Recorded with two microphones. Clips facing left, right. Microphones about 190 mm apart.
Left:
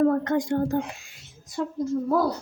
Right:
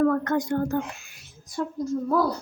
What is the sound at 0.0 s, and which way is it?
A woman's voice, 25° left (ahead or behind).